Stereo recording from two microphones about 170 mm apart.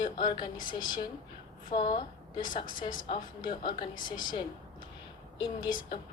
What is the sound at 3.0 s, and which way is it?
Speech, 30° left (ahead or behind).